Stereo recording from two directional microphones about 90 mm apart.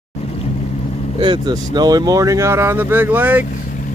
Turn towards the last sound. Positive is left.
turn(degrees=-20)  # may be behind; listen again after turning